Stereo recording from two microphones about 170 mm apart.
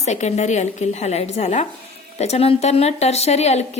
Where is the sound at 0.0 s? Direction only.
40° left (ahead or behind).